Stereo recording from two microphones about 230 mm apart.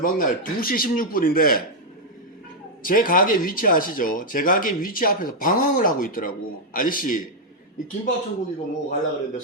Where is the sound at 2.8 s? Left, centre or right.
Left.